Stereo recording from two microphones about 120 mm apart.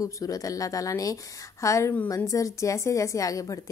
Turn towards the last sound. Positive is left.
turn(degrees=30)  # may be behind; listen again after turning